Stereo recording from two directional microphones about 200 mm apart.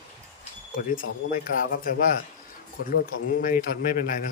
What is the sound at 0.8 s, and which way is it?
Speech, 45° left (ahead or behind).